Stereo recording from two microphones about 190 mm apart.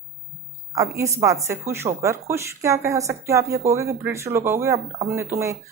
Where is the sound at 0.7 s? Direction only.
15° right (ahead or behind).